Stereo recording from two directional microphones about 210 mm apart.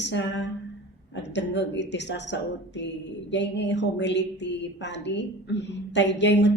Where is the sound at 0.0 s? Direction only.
55° left (ahead or behind).